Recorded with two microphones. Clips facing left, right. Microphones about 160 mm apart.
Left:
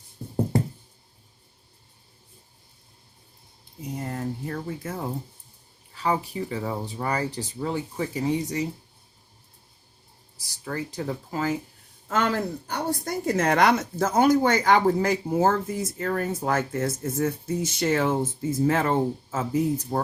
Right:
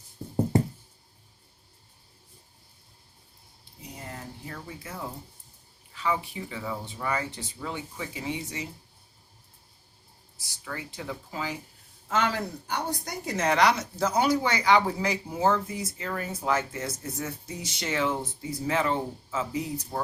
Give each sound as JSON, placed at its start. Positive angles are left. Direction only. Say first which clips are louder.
{"t": 4.1, "sound": "a sound", "louder": "left 9 dB", "side_deg": 45}
{"t": 5.9, "sound": "speech", "louder": "left 3 dB", "side_deg": 40}
{"t": 10.3, "sound": "speech", "louder": "left 7 dB", "side_deg": 40}